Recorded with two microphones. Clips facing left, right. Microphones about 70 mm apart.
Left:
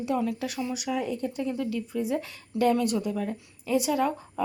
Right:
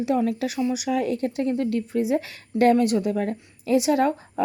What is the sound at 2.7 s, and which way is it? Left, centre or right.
Speech, right.